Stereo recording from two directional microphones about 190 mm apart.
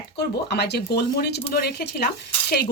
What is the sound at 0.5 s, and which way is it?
Speech, 60° left (ahead or behind).